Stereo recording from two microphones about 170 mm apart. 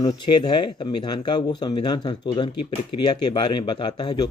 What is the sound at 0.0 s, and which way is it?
Speech, 25° left (ahead or behind).